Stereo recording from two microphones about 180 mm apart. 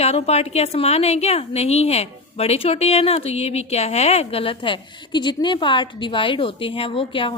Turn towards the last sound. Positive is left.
turn(degrees=30)  # may be behind; listen again after turning